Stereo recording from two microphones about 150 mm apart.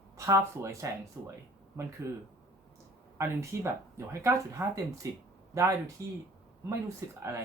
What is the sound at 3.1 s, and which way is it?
Speech, 20° right (ahead or behind).